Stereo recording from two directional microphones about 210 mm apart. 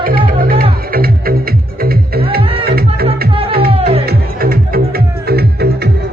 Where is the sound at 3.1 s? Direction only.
25° right (ahead or behind).